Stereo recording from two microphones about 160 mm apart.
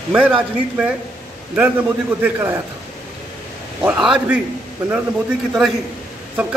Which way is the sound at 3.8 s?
5° right (ahead or behind).